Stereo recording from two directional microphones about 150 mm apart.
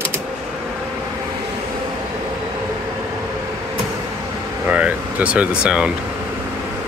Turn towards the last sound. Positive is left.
turn(degrees=-5)  # may be behind; listen again after turning